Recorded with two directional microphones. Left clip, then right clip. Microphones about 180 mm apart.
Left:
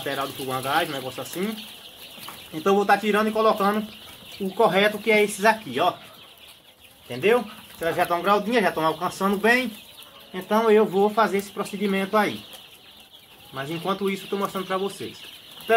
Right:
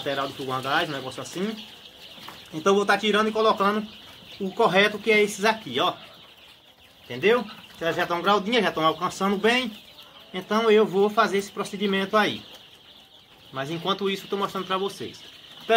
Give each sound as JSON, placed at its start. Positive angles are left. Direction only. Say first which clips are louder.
{"t": 0.0, "sound": "speech", "louder": "even", "side_deg": -15}
{"t": 2.6, "sound": "speech", "louder": "left 1 dB", "side_deg": -10}
{"t": 7.8, "sound": "speech", "louder": "left 1 dB", "side_deg": -10}
{"t": 13.6, "sound": "speech", "louder": "even", "side_deg": -15}